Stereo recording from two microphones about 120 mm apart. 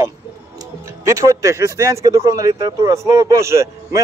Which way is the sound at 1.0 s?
25° right (ahead or behind).